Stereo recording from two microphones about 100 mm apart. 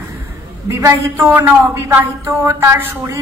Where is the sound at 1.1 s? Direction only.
20° right (ahead or behind).